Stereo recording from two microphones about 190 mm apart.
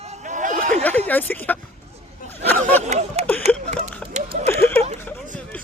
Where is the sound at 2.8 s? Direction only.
35° right (ahead or behind).